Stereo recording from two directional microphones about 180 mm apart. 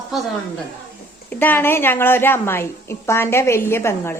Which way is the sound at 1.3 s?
10° left (ahead or behind).